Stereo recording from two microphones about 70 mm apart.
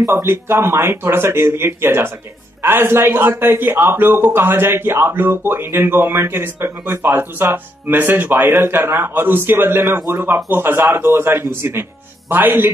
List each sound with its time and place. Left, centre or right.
0.0 s a man's voice: right